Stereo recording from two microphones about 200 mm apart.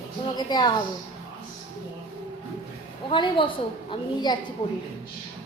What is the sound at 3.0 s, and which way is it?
Speech, 25° left (ahead or behind).